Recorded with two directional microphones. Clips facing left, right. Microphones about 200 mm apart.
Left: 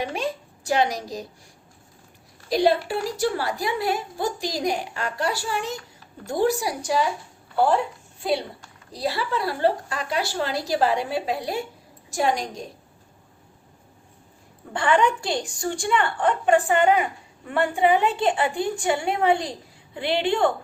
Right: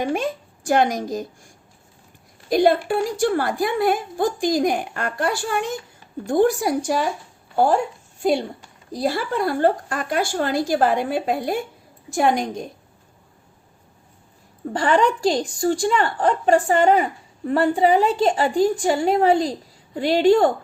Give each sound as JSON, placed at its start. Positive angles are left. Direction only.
{"t": 0.0, "sound": "speech", "side_deg": -50}
{"t": 2.5, "sound": "a woman's voice", "side_deg": -50}
{"t": 14.7, "sound": "a woman's voice", "side_deg": -40}